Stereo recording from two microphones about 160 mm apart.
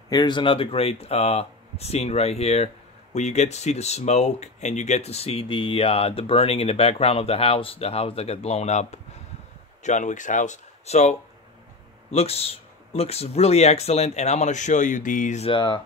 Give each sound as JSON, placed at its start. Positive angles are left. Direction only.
{"t": 0.1, "sound": "speech", "side_deg": 30}
{"t": 15.4, "sound": "speech", "side_deg": 30}